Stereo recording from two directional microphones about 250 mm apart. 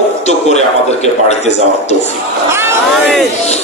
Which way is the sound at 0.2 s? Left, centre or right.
Left.